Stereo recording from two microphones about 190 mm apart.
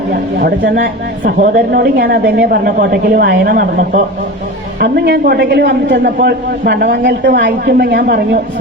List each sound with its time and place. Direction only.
0.1 s a man's voice: 55° right (ahead or behind)